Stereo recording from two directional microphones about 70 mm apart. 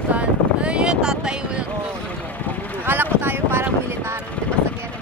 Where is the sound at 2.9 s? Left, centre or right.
Right.